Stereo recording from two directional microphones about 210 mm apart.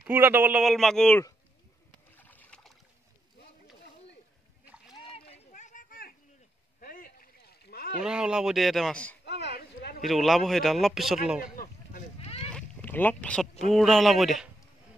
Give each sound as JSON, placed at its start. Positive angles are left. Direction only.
{"t": 0.0, "sound": "a man's voice", "side_deg": -10}
{"t": 2.1, "sound": "boat", "side_deg": 10}
{"t": 4.6, "sound": "splash", "side_deg": 0}
{"t": 5.1, "sound": "a sound", "side_deg": 30}
{"t": 6.8, "sound": "rowboat", "side_deg": 45}
{"t": 8.0, "sound": "a man's voice", "side_deg": -5}
{"t": 9.2, "sound": "a sound", "side_deg": 50}
{"t": 10.0, "sound": "a man's voice", "side_deg": 0}
{"t": 11.5, "sound": "a sound", "side_deg": 40}
{"t": 12.4, "sound": "boat", "side_deg": 5}
{"t": 13.7, "sound": "a man's voice", "side_deg": 0}